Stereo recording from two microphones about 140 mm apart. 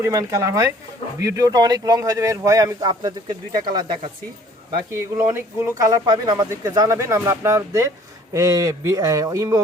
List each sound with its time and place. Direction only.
0.0 s a man's voice: 25° right (ahead or behind)
5.1 s a man's voice: 20° right (ahead or behind)